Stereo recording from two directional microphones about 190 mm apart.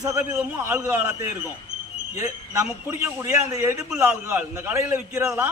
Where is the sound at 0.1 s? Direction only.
15° right (ahead or behind).